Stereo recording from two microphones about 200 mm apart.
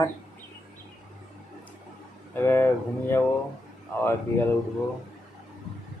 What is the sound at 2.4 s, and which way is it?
A man's voice, 10° left (ahead or behind).